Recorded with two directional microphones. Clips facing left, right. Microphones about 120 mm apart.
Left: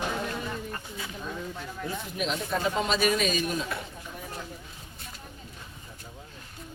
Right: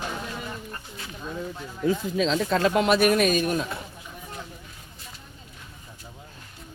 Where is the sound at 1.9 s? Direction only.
90° right; by 3.7 s 50° right (ahead or behind).